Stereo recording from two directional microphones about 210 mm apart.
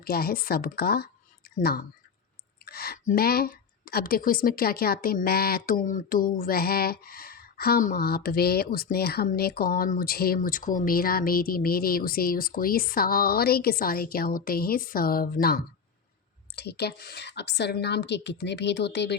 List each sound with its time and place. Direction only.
0.0 s speech: 45° left (ahead or behind)